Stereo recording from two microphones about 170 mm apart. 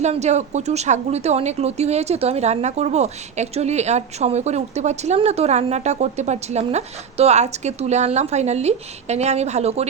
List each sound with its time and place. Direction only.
0.0 s a woman's voice: 40° right (ahead or behind)